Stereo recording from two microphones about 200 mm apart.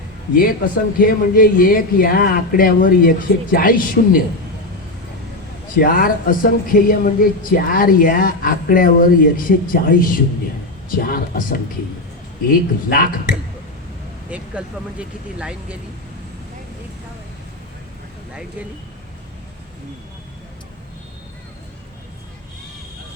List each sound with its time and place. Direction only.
0.3 s speech: 45° left (ahead or behind)
5.7 s speech: 45° left (ahead or behind)
14.3 s speech: 5° right (ahead or behind)